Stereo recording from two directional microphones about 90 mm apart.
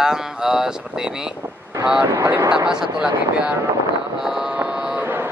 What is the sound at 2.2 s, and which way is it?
Speech, 30° right (ahead or behind).